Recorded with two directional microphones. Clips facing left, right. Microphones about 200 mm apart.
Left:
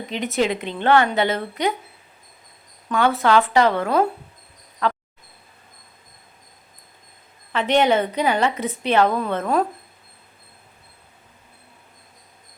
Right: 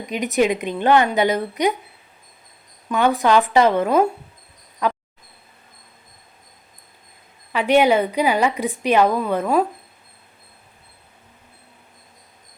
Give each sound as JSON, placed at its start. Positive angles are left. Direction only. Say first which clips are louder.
{"t": 0.0, "sound": "a woman's voice", "louder": "right 3 dB", "side_deg": -15}
{"t": 2.9, "sound": "a woman's voice", "louder": "right 1 dB", "side_deg": -15}
{"t": 4.8, "sound": "insect", "louder": "right 1 dB", "side_deg": -15}
{"t": 7.5, "sound": "a woman's voice", "louder": "right 2 dB", "side_deg": -10}